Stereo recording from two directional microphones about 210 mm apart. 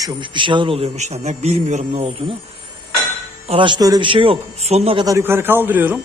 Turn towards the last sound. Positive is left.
turn(degrees=-10)  # may be behind; listen again after turning